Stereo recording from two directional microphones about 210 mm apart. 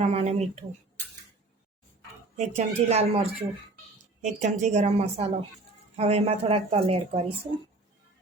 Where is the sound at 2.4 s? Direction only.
30° right (ahead or behind).